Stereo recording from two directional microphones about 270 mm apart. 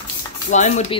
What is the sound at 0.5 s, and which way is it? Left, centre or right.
Speech, left.